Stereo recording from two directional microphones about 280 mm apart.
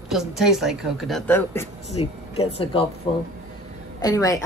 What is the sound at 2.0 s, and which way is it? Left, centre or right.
Speech, centre.